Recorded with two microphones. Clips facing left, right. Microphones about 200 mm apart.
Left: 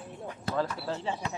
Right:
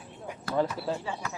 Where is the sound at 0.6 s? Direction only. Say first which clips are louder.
Right 3 dB; 5° right (ahead or behind).